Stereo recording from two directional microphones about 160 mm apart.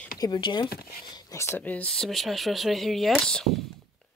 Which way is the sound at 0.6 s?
70° left (ahead or behind).